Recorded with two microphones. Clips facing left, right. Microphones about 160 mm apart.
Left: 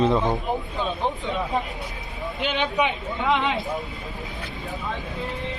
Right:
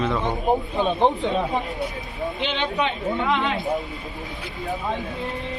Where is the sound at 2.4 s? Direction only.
10° left (ahead or behind).